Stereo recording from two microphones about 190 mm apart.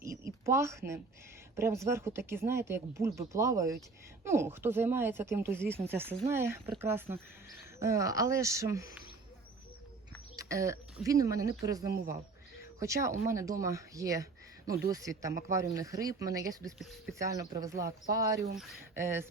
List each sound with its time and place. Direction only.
0.0 s a sound: 15° right (ahead or behind)
1.5 s speech: 15° right (ahead or behind)
10.3 s a sound: 15° right (ahead or behind)
11.0 s speech: 15° right (ahead or behind)
16.7 s speech: centre (ahead or behind)
17.2 s speech: 15° right (ahead or behind)
18.5 s speech: centre (ahead or behind)
18.9 s speech: 15° right (ahead or behind)